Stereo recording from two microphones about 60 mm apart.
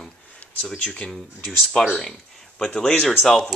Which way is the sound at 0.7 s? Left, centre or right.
Centre.